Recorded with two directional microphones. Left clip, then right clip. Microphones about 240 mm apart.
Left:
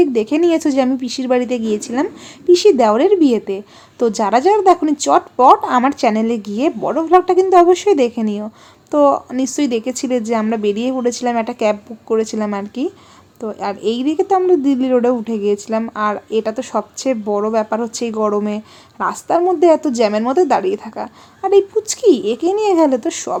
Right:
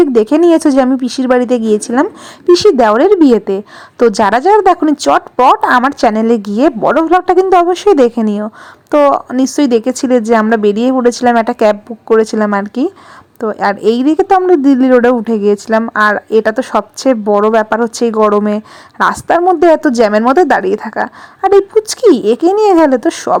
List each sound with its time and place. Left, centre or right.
0.0 s speech: right